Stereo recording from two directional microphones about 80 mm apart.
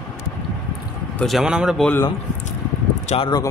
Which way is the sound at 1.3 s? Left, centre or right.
Centre.